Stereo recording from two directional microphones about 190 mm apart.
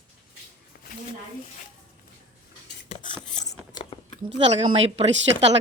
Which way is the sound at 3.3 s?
40° left (ahead or behind).